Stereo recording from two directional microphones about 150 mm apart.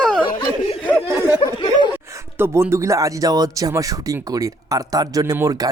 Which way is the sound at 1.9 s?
15° right (ahead or behind).